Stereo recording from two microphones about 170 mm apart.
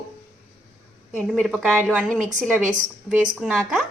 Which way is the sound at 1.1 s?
Centre (ahead or behind).